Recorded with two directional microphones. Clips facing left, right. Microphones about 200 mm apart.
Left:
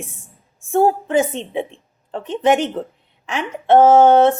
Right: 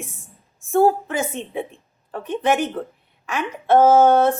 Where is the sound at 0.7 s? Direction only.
20° left (ahead or behind).